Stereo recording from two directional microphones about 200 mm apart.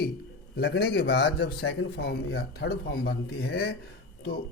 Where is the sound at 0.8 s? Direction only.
55° left (ahead or behind).